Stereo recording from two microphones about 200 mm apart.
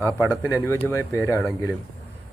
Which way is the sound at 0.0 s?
10° right (ahead or behind).